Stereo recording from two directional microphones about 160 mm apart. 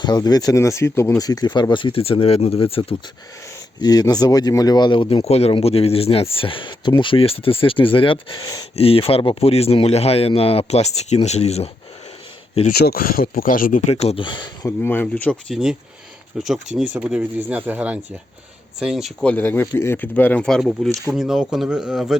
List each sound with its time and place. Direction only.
0.0 s speech: 25° left (ahead or behind)
3.8 s speech: 25° left (ahead or behind); by 11.7 s 40° left (ahead or behind)
12.7 s speech: 75° left (ahead or behind); by 13.9 s 55° left (ahead or behind)
13.9 s speech: 40° left (ahead or behind)
14.8 s speech: 10° left (ahead or behind)